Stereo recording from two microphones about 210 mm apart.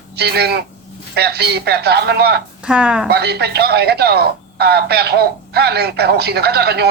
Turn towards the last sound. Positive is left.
turn(degrees=-50)  # may be behind; listen again after turning